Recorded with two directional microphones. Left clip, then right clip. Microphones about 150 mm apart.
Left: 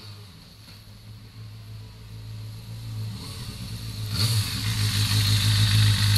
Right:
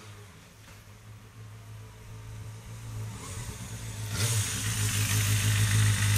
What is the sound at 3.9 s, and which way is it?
Vehicle, 45° right (ahead or behind).